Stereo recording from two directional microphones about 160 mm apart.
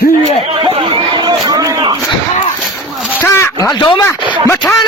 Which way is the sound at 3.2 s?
15° left (ahead or behind).